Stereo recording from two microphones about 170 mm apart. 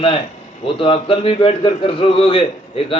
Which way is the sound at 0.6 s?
30° left (ahead or behind).